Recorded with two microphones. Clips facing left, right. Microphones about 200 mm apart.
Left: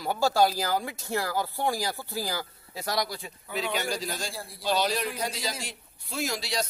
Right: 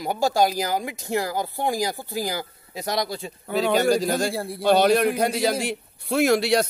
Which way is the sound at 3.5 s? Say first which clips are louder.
Right 10 dB; 40° right (ahead or behind).